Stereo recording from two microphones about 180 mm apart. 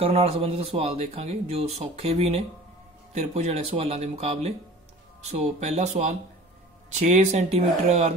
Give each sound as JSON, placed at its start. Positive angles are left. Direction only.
{"t": 0.0, "sound": "a man's voice", "side_deg": -35}